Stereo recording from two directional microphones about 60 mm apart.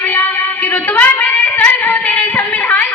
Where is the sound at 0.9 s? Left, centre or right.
Left.